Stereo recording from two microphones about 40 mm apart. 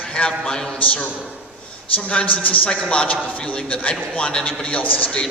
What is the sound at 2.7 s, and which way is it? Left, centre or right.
A woman's voice, left.